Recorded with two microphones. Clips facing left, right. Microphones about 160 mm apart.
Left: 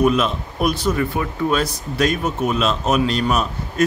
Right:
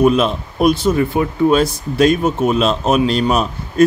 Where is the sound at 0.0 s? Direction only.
30° right (ahead or behind).